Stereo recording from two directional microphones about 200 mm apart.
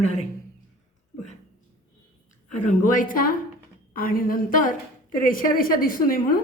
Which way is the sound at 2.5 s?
40° left (ahead or behind).